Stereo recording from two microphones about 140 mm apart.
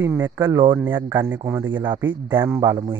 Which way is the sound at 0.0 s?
20° right (ahead or behind).